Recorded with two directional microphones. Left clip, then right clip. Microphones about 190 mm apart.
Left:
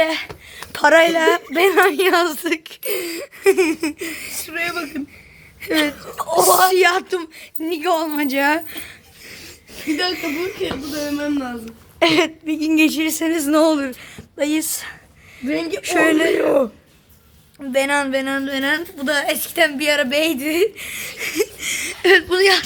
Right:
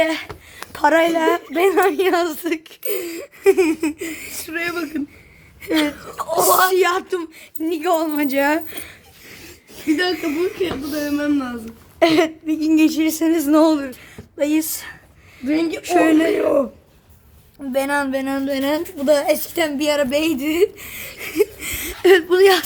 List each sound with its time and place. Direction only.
0.0 s a sound: 5° right (ahead or behind)
0.7 s a woman's voice: centre (ahead or behind)
4.8 s speech: 10° left (ahead or behind)
6.0 s speech: 25° left (ahead or behind)
6.7 s speech: 5° left (ahead or behind)
10.8 s a woman's voice: 10° right (ahead or behind); by 13.3 s 15° left (ahead or behind)
13.3 s a woman's voice: centre (ahead or behind)
13.7 s a woman's voice: 15° left (ahead or behind)
15.4 s a woman's voice: centre (ahead or behind)
17.6 s a woman's voice: 5° right (ahead or behind)
21.6 s speech: 15° right (ahead or behind)